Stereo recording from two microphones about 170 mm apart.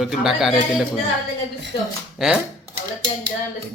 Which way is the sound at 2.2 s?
Centre (ahead or behind).